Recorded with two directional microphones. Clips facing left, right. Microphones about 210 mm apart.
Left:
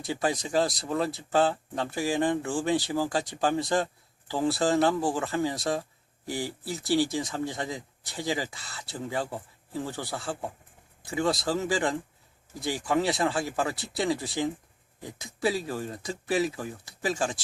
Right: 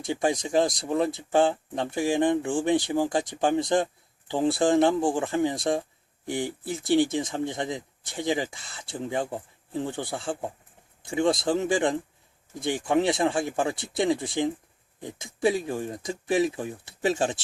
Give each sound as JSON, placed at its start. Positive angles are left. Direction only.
{"t": 0.1, "sound": "speech", "side_deg": -20}